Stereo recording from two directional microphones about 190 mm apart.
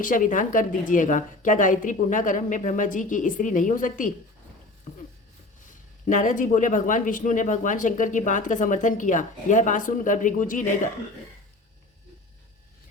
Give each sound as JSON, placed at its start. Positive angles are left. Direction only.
{"t": 0.0, "sound": "speech", "side_deg": 45}
{"t": 6.1, "sound": "speech", "side_deg": 40}